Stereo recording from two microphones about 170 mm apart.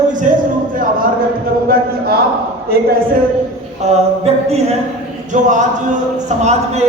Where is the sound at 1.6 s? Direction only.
65° right (ahead or behind).